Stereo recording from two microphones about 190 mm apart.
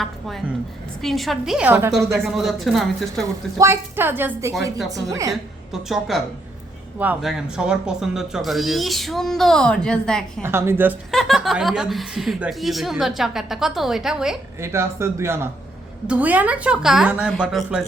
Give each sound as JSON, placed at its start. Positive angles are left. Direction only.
{"t": 0.0, "sound": "a woman's voice", "side_deg": 0}
{"t": 2.2, "sound": "speech", "side_deg": 0}
{"t": 3.6, "sound": "a woman's voice", "side_deg": -10}
{"t": 5.9, "sound": "speech", "side_deg": 0}
{"t": 10.4, "sound": "a woman's voice", "side_deg": -10}
{"t": 11.1, "sound": "speech", "side_deg": 0}
{"t": 14.6, "sound": "a woman's voice", "side_deg": -15}